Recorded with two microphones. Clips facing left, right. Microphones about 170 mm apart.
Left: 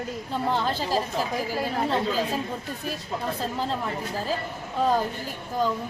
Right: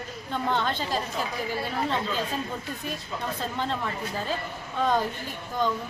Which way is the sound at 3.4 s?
Centre (ahead or behind).